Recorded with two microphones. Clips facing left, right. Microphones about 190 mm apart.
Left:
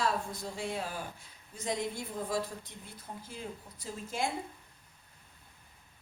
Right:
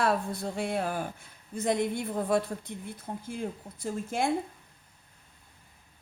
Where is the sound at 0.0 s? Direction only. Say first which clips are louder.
Right 5 dB; 60° right (ahead or behind).